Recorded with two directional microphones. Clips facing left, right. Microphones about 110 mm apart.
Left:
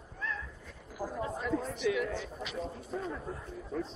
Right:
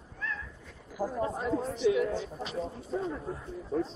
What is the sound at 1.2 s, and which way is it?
Speech, 30° right (ahead or behind).